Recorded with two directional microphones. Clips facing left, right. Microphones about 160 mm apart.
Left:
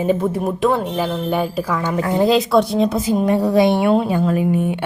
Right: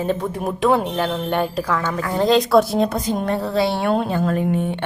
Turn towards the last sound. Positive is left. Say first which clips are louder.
# left 3 dB
turn(degrees=10)  # may be behind; listen again after turning